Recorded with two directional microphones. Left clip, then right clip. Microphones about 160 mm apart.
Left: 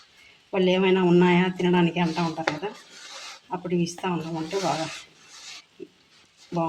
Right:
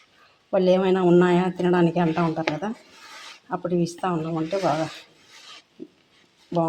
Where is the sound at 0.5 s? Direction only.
50° right (ahead or behind).